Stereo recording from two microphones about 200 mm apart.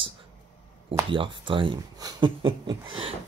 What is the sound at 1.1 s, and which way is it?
Speech, 25° right (ahead or behind).